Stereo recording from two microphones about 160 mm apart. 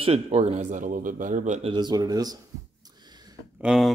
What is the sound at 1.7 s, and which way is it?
Speech, 25° right (ahead or behind).